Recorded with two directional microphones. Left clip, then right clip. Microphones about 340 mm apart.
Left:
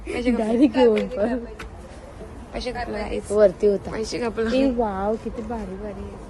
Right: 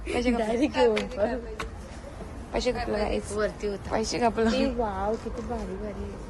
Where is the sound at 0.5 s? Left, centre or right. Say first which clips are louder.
Left 7 dB; left.